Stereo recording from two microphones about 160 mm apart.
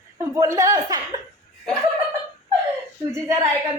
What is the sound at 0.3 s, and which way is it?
Speech, 20° right (ahead or behind).